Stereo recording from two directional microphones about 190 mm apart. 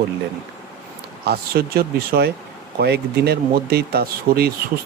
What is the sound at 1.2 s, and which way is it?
Speech, 55° right (ahead or behind).